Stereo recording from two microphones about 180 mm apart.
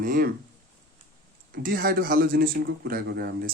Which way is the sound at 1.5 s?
55° right (ahead or behind).